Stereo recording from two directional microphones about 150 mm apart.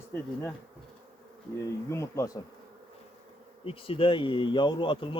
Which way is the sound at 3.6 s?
40° left (ahead or behind).